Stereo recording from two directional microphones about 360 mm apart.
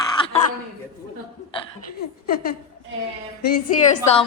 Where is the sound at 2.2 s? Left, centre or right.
Left.